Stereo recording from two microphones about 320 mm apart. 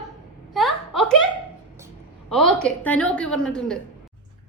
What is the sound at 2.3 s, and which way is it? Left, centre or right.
A woman's voice, centre.